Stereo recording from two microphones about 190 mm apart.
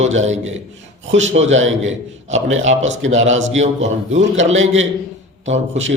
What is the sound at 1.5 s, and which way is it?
Speech, 90° right.